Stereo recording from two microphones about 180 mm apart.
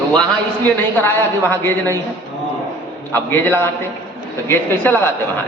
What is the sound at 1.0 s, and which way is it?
Speech, 15° left (ahead or behind).